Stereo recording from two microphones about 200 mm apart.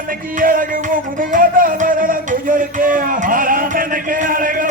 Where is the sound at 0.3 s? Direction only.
45° right (ahead or behind).